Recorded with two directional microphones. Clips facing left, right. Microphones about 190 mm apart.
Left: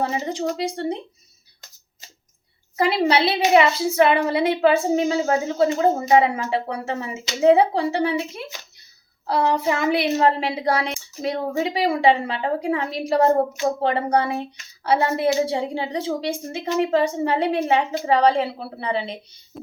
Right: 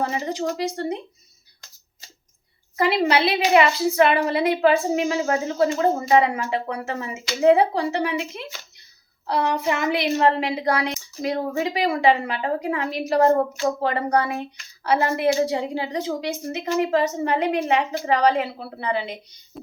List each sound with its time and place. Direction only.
0.3 s a woman's voice: 25° left (ahead or behind)
2.7 s a woman's voice: 30° left (ahead or behind)
19.5 s a sound: centre (ahead or behind)